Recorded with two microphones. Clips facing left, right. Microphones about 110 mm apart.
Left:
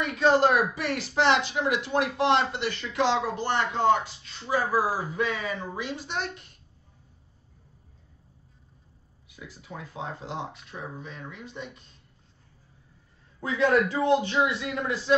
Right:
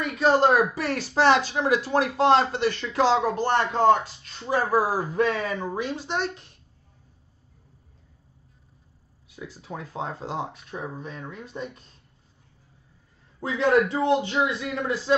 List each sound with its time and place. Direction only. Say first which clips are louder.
0.2 s speech: right 2 dB; 35° right (ahead or behind)
9.4 s speech: right 5 dB; 40° right (ahead or behind)
13.4 s a man's voice: right 2 dB; 25° right (ahead or behind)
14.7 s speech: right 2 dB; 35° right (ahead or behind)